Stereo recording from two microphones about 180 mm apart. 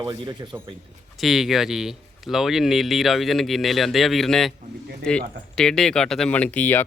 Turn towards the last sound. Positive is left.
turn(degrees=10)  # may be behind; listen again after turning